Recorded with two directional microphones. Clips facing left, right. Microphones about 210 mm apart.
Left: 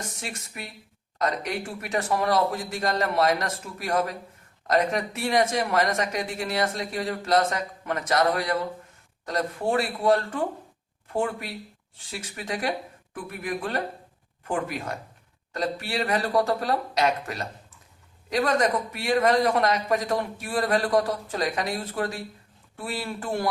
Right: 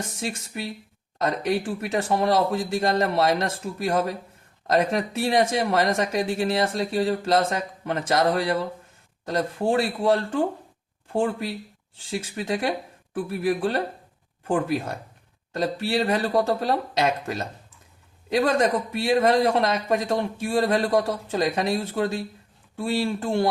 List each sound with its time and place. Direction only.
0.0 s speech: 30° right (ahead or behind)